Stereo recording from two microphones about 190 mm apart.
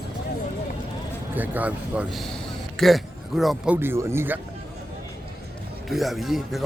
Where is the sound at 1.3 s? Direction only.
10° right (ahead or behind).